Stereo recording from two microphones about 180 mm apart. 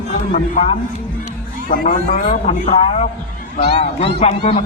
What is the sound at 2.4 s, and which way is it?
Speech, 40° left (ahead or behind).